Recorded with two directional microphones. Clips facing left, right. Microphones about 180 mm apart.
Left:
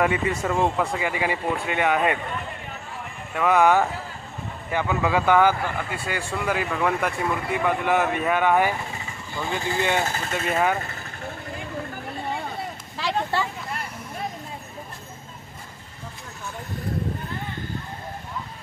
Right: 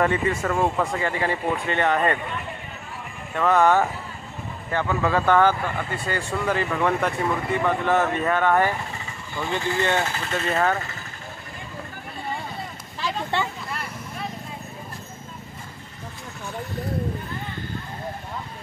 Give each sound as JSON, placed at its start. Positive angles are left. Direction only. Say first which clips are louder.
{"t": 0.0, "sound": "speech", "louder": "right 1 dB", "side_deg": 10}
{"t": 3.3, "sound": "speech", "louder": "even", "side_deg": 10}
{"t": 9.8, "sound": "speech", "louder": "even", "side_deg": 15}
{"t": 10.0, "sound": "speech", "louder": "left 1 dB", "side_deg": 40}
{"t": 10.3, "sound": "speech", "louder": "right 1 dB", "side_deg": 10}